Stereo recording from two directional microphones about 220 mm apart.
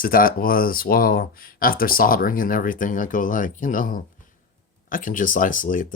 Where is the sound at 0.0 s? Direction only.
40° left (ahead or behind).